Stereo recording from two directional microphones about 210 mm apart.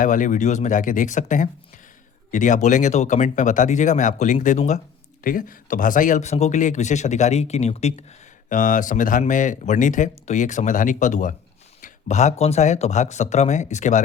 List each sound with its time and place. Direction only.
0.0 s speech: 40° left (ahead or behind)